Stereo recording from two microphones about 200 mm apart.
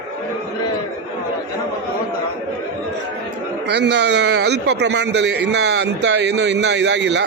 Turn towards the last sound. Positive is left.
turn(degrees=-60)  # may be behind; listen again after turning